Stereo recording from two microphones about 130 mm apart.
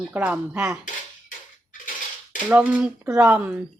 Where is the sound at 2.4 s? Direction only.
10° right (ahead or behind).